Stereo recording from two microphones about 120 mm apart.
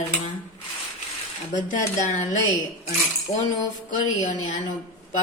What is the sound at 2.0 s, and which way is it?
Speech, 90° left.